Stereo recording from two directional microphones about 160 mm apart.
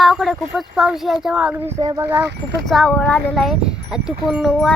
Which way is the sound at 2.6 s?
5° left (ahead or behind).